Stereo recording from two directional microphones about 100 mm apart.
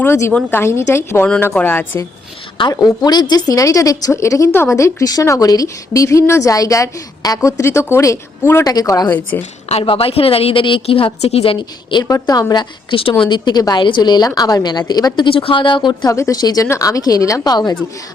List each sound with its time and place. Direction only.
0.0 s a woman's voice: 25° left (ahead or behind)
2.6 s speech: 45° left (ahead or behind); by 8.6 s 25° left (ahead or behind)
8.6 s speech: 40° left (ahead or behind)
9.0 s a woman's voice: 20° left (ahead or behind)
9.6 s a woman's voice: 75° left (ahead or behind)
12.0 s speech: 40° left (ahead or behind)
12.9 s a woman's voice: 60° left (ahead or behind)
16.1 s speech: 35° left (ahead or behind)